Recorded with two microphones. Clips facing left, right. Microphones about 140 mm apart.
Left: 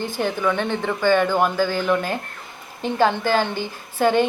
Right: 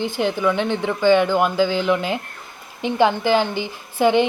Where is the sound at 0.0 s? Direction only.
15° right (ahead or behind).